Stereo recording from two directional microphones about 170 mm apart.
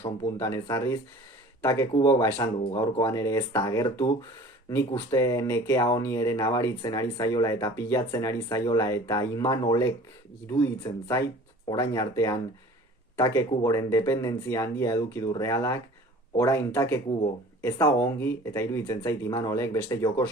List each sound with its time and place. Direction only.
0.0 s speech: 15° left (ahead or behind)